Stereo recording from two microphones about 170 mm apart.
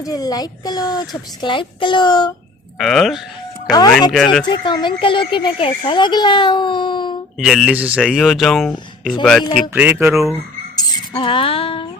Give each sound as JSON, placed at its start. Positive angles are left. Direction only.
{"t": 0.0, "sound": "speech", "side_deg": 20}
{"t": 2.7, "sound": "speech", "side_deg": 0}
{"t": 3.7, "sound": "speech", "side_deg": 20}
{"t": 4.1, "sound": "speech", "side_deg": 0}
{"t": 4.4, "sound": "speech", "side_deg": 25}
{"t": 7.3, "sound": "speech", "side_deg": 0}
{"t": 9.6, "sound": "speech", "side_deg": -10}
{"t": 10.8, "sound": "a sound", "side_deg": 25}